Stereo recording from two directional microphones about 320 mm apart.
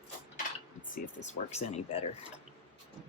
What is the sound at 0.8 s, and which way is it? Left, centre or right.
Speech, left.